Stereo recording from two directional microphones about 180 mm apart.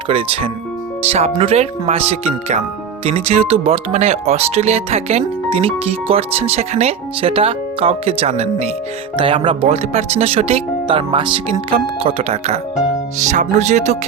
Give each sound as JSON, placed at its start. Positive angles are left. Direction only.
{"t": 0.1, "sound": "speech", "side_deg": -30}